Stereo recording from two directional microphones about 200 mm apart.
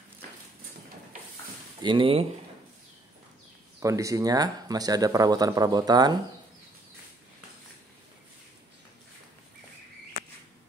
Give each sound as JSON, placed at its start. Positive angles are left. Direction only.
{"t": 1.8, "sound": "speech", "side_deg": -25}
{"t": 3.8, "sound": "speech", "side_deg": -15}